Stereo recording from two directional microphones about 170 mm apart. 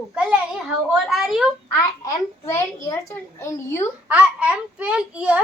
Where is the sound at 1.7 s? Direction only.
15° left (ahead or behind).